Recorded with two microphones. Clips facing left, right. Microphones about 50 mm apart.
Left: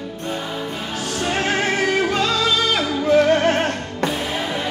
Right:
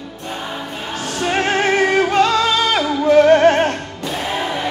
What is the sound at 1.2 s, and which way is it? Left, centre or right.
Music, right.